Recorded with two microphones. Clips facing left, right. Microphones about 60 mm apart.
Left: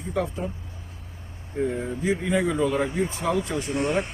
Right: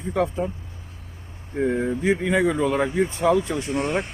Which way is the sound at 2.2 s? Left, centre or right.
Right.